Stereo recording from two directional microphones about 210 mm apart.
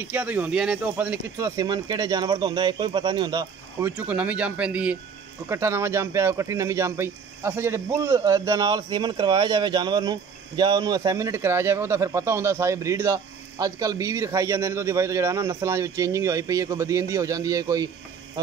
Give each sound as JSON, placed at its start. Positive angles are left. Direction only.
{"t": 0.0, "sound": "speech", "side_deg": -10}
{"t": 3.9, "sound": "speech", "side_deg": -5}